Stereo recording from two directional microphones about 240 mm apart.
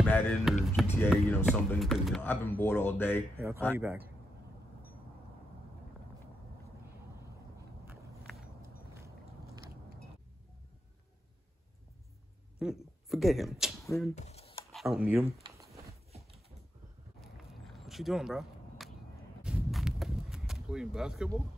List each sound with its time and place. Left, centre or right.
0.0 s speech: centre
3.3 s a man's voice: centre
7.8 s walk: centre
12.5 s speech: centre
14.1 s computer keyboard: left
14.7 s speech: centre
15.4 s a sound: centre
17.5 s walk: centre
19.4 s a sound: centre